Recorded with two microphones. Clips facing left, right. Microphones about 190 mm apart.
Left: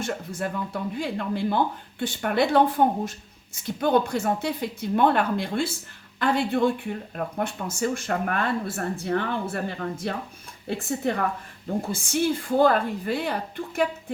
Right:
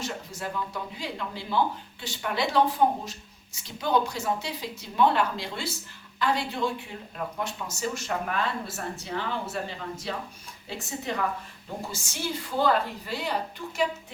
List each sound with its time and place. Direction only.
0.0 s a woman's voice: 55° left (ahead or behind)